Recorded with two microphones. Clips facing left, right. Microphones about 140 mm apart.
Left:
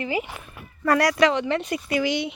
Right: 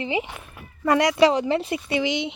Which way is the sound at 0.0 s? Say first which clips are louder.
Right 1 dB; 25° right (ahead or behind).